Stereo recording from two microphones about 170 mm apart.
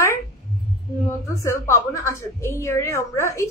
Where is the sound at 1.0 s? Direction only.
15° left (ahead or behind).